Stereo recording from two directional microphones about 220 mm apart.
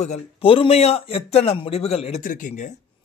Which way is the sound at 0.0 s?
25° left (ahead or behind).